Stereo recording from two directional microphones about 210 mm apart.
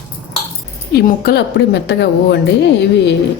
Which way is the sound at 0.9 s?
50° left (ahead or behind).